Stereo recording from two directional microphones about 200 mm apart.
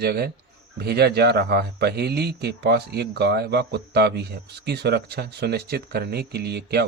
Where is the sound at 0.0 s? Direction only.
55° right (ahead or behind).